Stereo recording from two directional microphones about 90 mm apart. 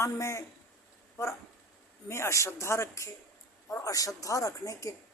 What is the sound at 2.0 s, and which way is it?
A man's voice, 30° left (ahead or behind).